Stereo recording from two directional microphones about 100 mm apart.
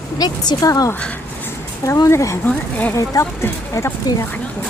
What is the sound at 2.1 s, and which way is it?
Speech, 30° left (ahead or behind).